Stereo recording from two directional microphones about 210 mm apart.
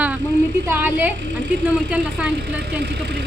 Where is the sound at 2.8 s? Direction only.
50° right (ahead or behind).